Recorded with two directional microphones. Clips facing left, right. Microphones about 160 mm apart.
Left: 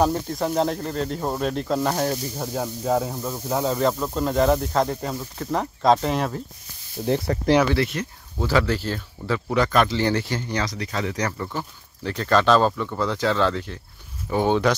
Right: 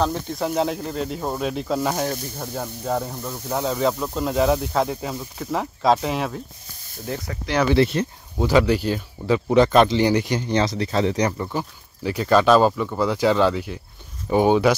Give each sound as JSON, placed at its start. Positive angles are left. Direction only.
{"t": 0.1, "sound": "speech", "side_deg": 0}
{"t": 7.3, "sound": "speech", "side_deg": 50}
{"t": 7.7, "sound": "speech", "side_deg": -30}
{"t": 8.4, "sound": "speech", "side_deg": -15}